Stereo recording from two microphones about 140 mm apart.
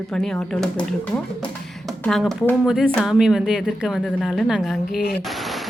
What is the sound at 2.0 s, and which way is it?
A woman's voice, centre (ahead or behind).